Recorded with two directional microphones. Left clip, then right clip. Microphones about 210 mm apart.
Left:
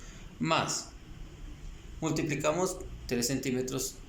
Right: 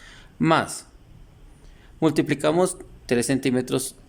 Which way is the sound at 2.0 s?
55° right (ahead or behind).